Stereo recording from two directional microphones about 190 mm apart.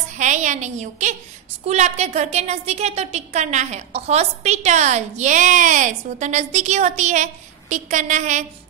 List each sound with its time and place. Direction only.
0.2 s a woman's voice: 40° right (ahead or behind)